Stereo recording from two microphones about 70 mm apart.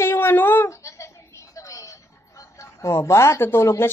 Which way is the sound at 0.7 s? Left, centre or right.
Left.